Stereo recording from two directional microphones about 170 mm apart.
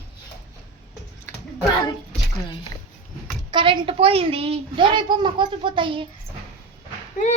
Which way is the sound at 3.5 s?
30° right (ahead or behind).